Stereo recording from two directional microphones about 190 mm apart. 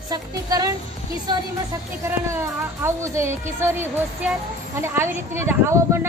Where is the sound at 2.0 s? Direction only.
15° right (ahead or behind).